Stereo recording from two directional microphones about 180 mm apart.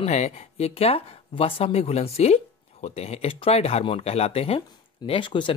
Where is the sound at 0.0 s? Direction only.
35° left (ahead or behind).